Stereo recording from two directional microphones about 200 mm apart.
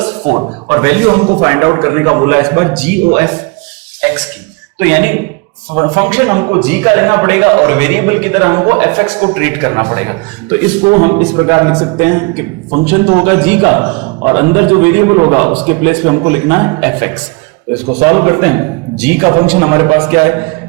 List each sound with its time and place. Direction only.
0.0 s a man's voice: 25° right (ahead or behind)
4.8 s a man's voice: 10° right (ahead or behind)
6.8 s a man's voice: 15° right (ahead or behind)